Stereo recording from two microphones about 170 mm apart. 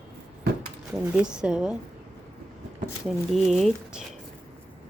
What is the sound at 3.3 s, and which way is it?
Speech, centre (ahead or behind).